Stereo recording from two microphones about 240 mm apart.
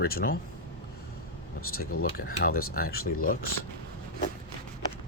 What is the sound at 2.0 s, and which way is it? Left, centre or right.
Speech, left.